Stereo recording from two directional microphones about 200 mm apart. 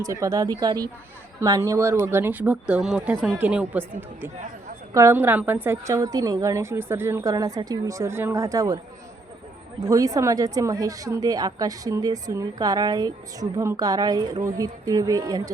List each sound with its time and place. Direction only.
0.0 s a woman's voice: 15° right (ahead or behind)
9.8 s a woman's voice: 15° right (ahead or behind)